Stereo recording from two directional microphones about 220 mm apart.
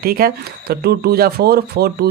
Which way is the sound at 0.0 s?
40° right (ahead or behind).